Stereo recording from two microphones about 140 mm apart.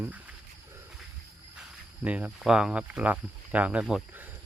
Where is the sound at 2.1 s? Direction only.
10° right (ahead or behind).